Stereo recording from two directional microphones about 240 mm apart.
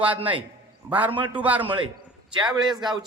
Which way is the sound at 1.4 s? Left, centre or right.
Centre.